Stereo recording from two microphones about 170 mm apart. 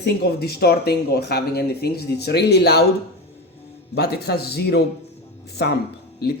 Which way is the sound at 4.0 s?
70° left (ahead or behind).